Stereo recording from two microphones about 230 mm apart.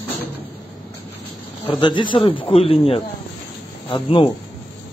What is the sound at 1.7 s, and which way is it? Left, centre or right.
Speech, left.